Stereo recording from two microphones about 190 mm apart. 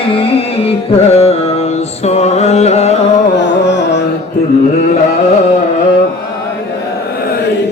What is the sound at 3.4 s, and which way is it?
Carnatic music, 70° left (ahead or behind).